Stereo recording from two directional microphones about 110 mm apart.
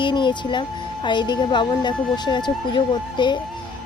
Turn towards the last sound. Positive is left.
turn(degrees=45)  # may be behind; listen again after turning